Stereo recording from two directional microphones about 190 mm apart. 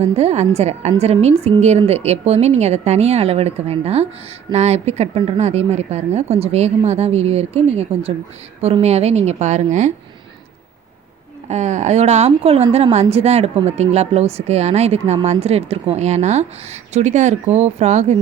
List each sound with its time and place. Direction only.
0.0 s a woman's voice: 35° right (ahead or behind)
11.4 s a woman's voice: 35° right (ahead or behind)